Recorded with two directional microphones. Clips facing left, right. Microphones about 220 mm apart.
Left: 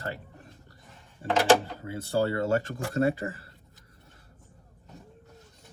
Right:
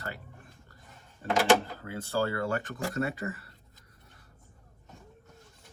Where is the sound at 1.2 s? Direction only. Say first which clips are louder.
Left 2 dB; 30° left (ahead or behind).